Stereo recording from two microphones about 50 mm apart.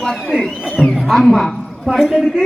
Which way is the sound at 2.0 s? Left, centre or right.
Centre.